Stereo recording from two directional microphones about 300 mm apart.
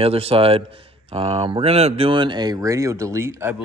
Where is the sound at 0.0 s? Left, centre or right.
Centre.